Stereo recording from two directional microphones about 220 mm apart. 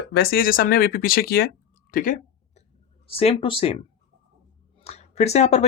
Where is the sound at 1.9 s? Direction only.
35° left (ahead or behind).